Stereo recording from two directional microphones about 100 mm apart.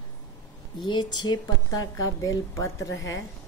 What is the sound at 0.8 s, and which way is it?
Speech, 45° left (ahead or behind).